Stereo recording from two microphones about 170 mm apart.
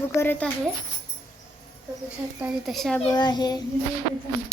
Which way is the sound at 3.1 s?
25° left (ahead or behind).